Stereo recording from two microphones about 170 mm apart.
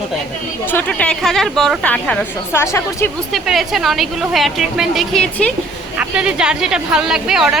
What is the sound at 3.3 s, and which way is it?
A woman's voice, centre (ahead or behind).